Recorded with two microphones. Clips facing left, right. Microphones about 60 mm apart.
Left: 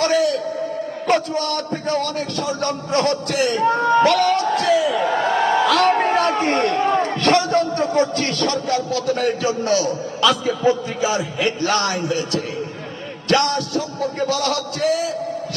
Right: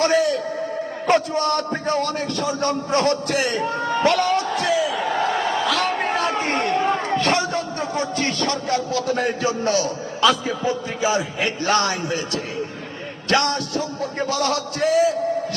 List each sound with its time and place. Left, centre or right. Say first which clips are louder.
0.0 s a man's voice: left 1 dB; right
4.8 s a man's voice: left 3 dB; centre
7.2 s a man's voice: left 4 dB; centre